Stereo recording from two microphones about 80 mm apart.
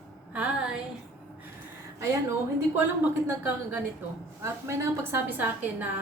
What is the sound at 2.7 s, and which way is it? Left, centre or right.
Speech, right.